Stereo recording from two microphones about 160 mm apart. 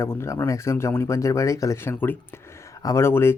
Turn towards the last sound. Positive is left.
turn(degrees=15)  # may be behind; listen again after turning